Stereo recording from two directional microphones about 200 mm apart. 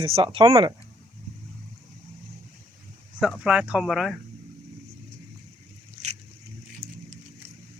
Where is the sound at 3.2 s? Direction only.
5° right (ahead or behind).